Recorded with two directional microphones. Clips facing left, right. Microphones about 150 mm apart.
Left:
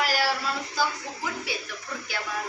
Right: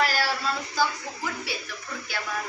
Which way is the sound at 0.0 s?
10° left (ahead or behind).